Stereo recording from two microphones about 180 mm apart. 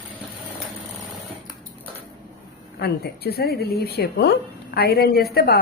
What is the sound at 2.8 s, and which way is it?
Speech, 60° left (ahead or behind).